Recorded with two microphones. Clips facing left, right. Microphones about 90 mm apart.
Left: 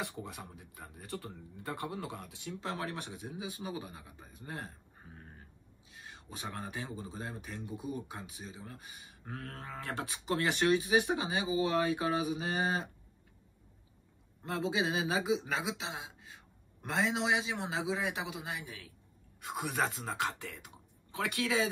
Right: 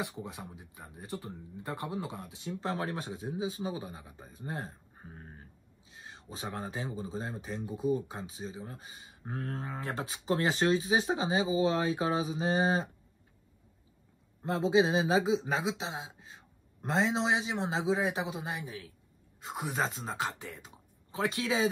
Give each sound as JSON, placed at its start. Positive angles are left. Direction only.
{"t": 0.2, "sound": "speech", "side_deg": -20}
{"t": 14.4, "sound": "speech", "side_deg": -25}